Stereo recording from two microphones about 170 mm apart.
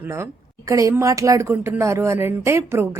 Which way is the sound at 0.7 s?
20° right (ahead or behind).